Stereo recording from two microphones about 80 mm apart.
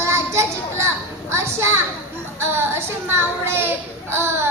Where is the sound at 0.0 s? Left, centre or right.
Right.